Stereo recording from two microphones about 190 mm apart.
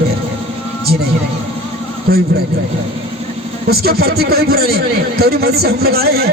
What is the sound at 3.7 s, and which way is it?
A man's voice, 55° right (ahead or behind).